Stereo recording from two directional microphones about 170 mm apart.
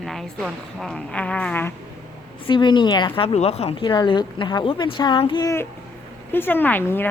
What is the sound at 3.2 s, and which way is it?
Speech, 35° left (ahead or behind).